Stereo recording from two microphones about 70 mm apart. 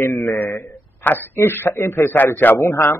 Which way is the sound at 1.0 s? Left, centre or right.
Left.